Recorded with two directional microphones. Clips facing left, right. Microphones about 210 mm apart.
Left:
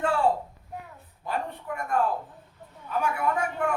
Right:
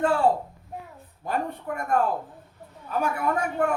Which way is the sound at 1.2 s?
45° right (ahead or behind).